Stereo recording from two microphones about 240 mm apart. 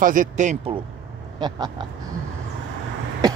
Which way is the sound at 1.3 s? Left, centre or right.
Centre.